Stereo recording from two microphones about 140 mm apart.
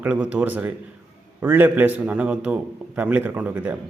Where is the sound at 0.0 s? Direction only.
10° right (ahead or behind).